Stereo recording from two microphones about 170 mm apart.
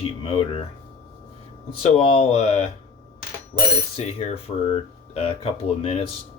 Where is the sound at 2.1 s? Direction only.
35° left (ahead or behind).